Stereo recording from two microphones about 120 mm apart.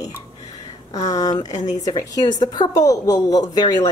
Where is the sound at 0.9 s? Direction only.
30° left (ahead or behind).